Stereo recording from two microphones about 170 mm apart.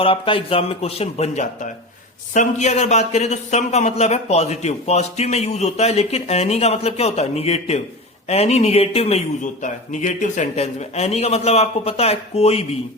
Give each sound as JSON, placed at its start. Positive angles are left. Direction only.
{"t": 0.0, "sound": "speech", "side_deg": 30}